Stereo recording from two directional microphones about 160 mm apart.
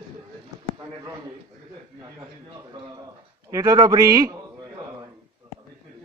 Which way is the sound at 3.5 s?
20° right (ahead or behind).